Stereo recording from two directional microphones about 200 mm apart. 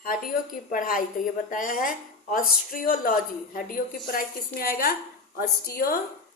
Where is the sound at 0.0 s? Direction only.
45° left (ahead or behind).